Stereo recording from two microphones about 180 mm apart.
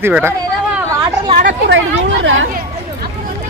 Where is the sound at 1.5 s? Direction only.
75° right (ahead or behind).